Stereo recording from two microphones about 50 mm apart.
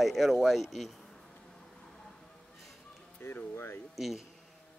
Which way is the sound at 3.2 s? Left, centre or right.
Left.